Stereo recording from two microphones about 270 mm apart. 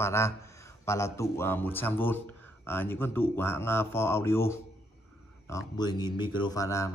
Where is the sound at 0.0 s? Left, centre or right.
Centre.